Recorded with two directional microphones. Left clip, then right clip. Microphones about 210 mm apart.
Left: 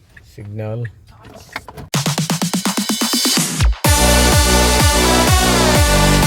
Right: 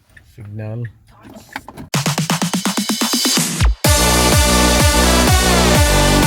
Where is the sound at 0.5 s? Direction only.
15° left (ahead or behind).